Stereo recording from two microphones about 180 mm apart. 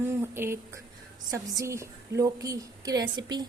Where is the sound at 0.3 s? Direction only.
15° right (ahead or behind).